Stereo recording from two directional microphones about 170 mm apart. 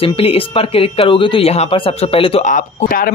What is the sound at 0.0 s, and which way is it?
Speech, 35° left (ahead or behind).